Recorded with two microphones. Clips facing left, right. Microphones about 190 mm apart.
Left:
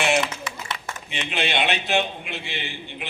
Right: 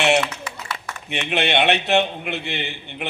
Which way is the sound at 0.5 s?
20° left (ahead or behind).